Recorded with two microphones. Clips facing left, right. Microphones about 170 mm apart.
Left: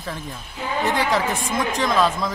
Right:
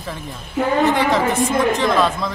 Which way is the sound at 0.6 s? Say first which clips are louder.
Right 11 dB; 70° right (ahead or behind).